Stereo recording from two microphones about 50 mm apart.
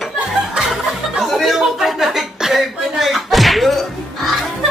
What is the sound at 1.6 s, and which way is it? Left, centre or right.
Chuckle, centre.